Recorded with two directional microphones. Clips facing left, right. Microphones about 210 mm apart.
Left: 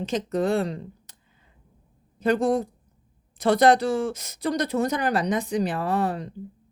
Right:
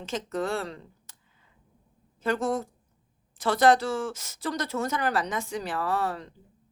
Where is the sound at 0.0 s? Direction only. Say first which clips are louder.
Left 6 dB; 20° left (ahead or behind).